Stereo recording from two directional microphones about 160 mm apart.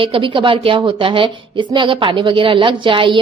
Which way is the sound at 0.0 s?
35° right (ahead or behind).